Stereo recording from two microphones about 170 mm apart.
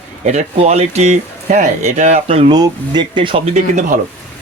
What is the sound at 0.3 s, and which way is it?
Speech, 40° right (ahead or behind).